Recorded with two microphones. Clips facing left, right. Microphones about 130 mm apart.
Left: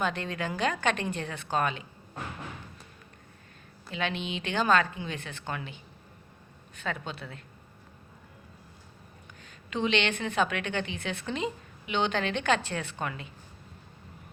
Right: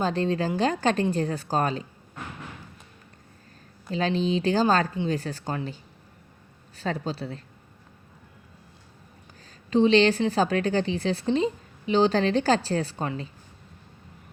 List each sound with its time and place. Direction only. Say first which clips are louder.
0.0 s a woman's voice: right 6 dB; 35° right (ahead or behind)
3.9 s a woman's voice: right 8 dB; 35° right (ahead or behind)
9.4 s a woman's voice: right 10 dB; 35° right (ahead or behind)